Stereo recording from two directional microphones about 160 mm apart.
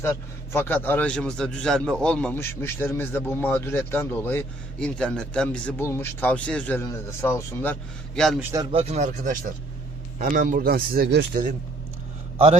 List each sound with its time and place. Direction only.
0.0 s a man's voice: 15° left (ahead or behind)
8.7 s speech: 40° right (ahead or behind)
10.3 s speech: 75° right (ahead or behind)